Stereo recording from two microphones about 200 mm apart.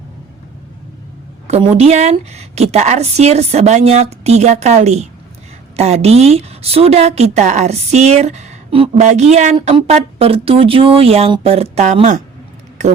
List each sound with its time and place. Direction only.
1.5 s speech: 30° right (ahead or behind)